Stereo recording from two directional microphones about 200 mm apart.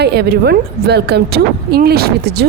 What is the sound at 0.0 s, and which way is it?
A woman's voice, 55° right (ahead or behind).